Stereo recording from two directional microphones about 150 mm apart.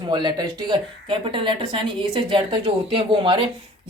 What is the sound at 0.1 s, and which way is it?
A woman's voice, 30° right (ahead or behind).